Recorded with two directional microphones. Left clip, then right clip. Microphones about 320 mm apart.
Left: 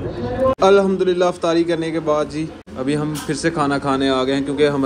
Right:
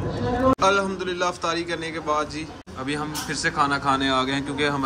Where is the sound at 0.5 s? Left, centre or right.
Centre.